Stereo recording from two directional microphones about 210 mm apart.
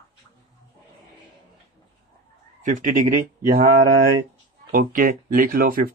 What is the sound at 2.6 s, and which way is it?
Speech, 40° right (ahead or behind).